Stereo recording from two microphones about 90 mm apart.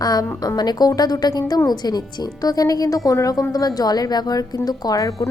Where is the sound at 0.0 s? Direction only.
45° left (ahead or behind).